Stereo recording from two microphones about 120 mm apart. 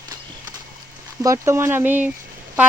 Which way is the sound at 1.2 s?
25° right (ahead or behind).